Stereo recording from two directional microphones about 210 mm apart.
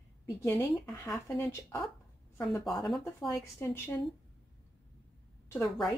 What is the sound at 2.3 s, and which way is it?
Speech, centre (ahead or behind).